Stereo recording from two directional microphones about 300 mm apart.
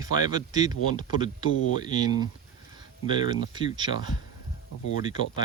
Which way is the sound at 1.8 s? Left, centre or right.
Centre.